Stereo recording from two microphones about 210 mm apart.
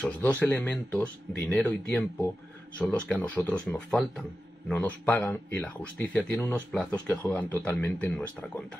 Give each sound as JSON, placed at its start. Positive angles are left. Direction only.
{"t": 0.0, "sound": "speech", "side_deg": 5}